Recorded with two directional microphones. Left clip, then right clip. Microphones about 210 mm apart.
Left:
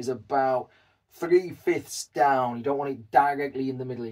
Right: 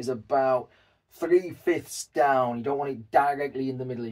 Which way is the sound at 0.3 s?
15° right (ahead or behind).